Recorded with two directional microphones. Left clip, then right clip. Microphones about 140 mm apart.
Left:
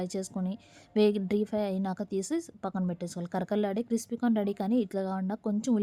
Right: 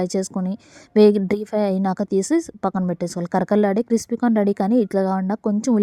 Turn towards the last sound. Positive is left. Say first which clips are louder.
# right 10 dB
turn(degrees=-45)  # may be behind; listen again after turning